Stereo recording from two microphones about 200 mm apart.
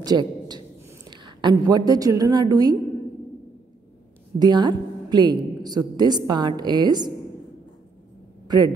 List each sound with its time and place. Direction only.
0.0 s a man's voice: 20° right (ahead or behind)
4.4 s a woman's voice: 20° right (ahead or behind)
8.5 s a woman's voice: 20° right (ahead or behind)